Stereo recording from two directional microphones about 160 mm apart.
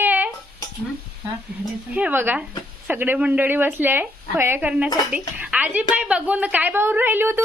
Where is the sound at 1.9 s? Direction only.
10° right (ahead or behind).